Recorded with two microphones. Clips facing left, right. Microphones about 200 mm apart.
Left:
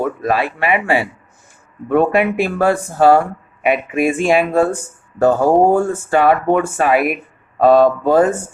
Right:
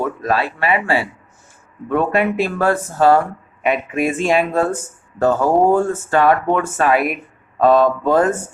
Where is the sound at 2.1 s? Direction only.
10° left (ahead or behind).